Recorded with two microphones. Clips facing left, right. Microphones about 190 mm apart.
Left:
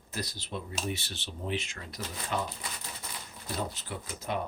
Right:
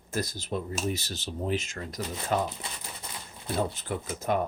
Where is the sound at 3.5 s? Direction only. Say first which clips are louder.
Right 6 dB; 50° right (ahead or behind).